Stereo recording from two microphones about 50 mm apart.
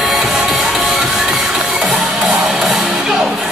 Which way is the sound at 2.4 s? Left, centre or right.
Centre.